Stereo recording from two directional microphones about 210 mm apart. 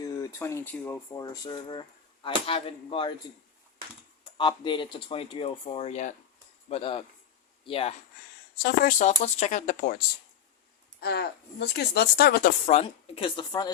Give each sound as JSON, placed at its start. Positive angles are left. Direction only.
{"t": 0.0, "sound": "speech", "side_deg": 15}
{"t": 1.2, "sound": "speech", "side_deg": 20}
{"t": 4.2, "sound": "speech", "side_deg": 20}
{"t": 8.6, "sound": "speech", "side_deg": 40}
{"t": 11.0, "sound": "a woman's voice", "side_deg": 50}
{"t": 12.6, "sound": "speech", "side_deg": 30}